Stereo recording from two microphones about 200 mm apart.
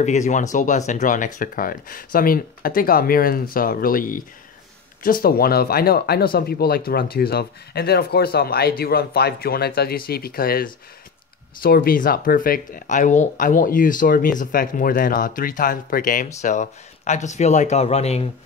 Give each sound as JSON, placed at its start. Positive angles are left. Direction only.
{"t": 0.0, "sound": "speech", "side_deg": 35}